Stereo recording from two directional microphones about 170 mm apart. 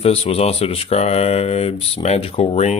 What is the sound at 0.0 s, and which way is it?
Speech, 35° left (ahead or behind).